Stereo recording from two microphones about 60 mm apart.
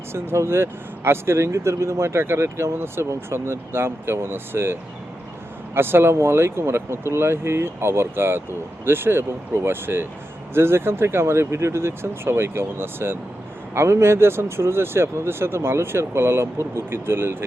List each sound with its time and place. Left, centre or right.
0.1 s speech: right